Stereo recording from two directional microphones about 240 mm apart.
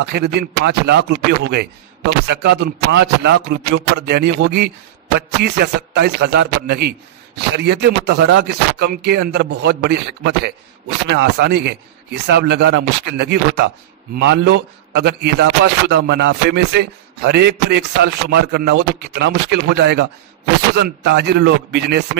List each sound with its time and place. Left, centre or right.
0.0 s a man's voice: right